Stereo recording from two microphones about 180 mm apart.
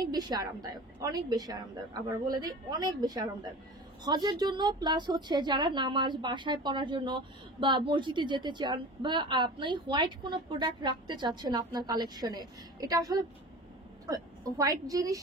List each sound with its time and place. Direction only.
0.0 s speech: 20° right (ahead or behind)